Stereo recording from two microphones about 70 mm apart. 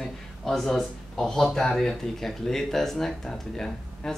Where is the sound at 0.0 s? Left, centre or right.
Centre.